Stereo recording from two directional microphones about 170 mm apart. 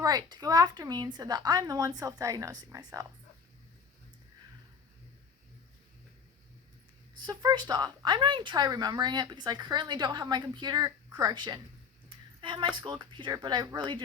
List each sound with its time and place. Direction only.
0.0 s speech: 25° right (ahead or behind)
7.3 s speech: 25° right (ahead or behind)